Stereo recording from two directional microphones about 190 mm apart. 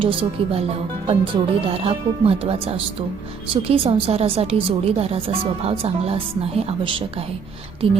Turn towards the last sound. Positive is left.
turn(degrees=-30)  # may be behind; listen again after turning